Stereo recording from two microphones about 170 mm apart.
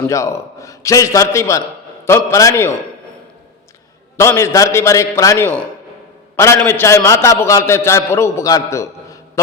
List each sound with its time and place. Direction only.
0.1 s a man's voice: 15° left (ahead or behind)
4.2 s a man's voice: 15° left (ahead or behind)